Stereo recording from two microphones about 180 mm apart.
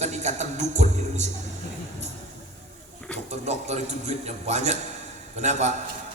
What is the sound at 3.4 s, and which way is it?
A man's voice, 40° right (ahead or behind).